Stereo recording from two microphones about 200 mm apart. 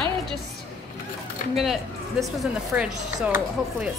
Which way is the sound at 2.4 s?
5° right (ahead or behind).